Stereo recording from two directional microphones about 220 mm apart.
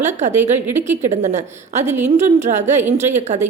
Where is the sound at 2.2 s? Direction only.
30° right (ahead or behind).